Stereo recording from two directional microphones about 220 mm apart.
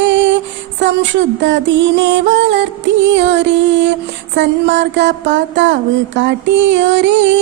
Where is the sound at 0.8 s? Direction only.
55° right (ahead or behind).